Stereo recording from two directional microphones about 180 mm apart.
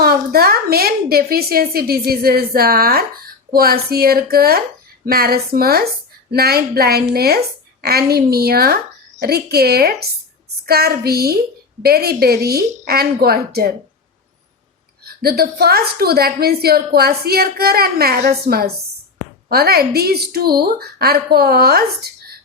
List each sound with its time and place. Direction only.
0.0 s a woman's voice: 60° right (ahead or behind)
15.0 s a woman's voice: 60° right (ahead or behind)